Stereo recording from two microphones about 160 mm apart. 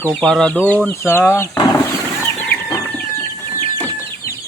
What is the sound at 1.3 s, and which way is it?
Speech, 20° left (ahead or behind).